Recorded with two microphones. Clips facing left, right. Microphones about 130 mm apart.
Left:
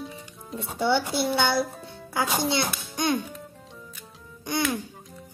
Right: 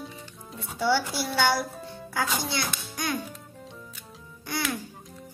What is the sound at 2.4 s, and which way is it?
Speech, 25° left (ahead or behind).